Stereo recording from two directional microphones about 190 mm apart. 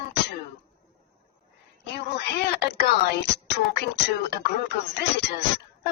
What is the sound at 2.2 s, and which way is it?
Speech, 60° left (ahead or behind).